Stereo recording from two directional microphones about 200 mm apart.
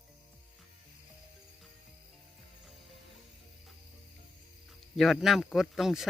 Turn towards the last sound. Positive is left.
turn(degrees=0)  # may be behind; listen again after turning